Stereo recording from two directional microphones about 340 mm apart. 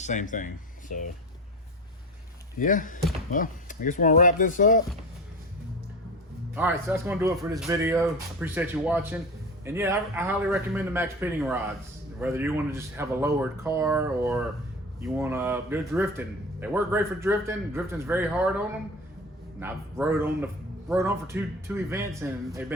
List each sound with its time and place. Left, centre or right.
0.0 s speech: left
2.6 s speech: left
6.5 s speech: centre